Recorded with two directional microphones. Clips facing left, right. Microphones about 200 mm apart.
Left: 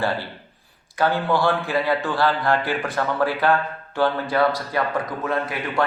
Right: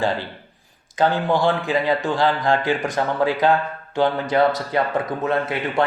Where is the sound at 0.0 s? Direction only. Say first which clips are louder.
Right 2 dB; 15° right (ahead or behind).